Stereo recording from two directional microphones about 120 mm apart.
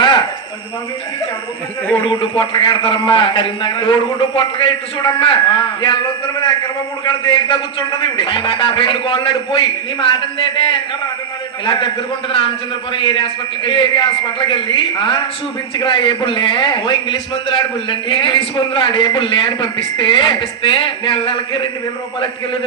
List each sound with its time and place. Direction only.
0.0 s a sound: 40° left (ahead or behind)
2.0 s a man's voice: 45° left (ahead or behind)
7.0 s a man's voice: 45° left (ahead or behind)